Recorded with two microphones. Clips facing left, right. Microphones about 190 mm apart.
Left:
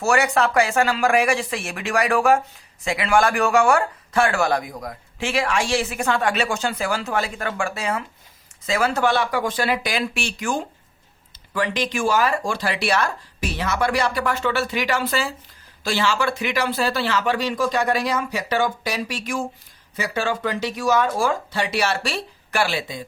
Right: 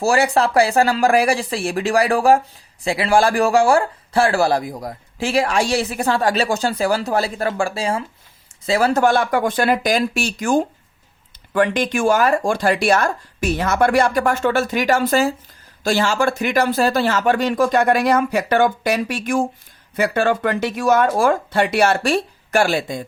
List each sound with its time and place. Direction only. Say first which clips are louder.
0.0 s speech: right 3 dB; 30° right (ahead or behind); by 23.0 s 50° right (ahead or behind)